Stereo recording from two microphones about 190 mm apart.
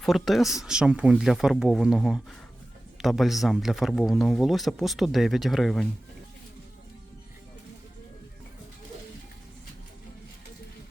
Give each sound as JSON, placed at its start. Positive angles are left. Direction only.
{"t": 0.0, "sound": "speech", "side_deg": 0}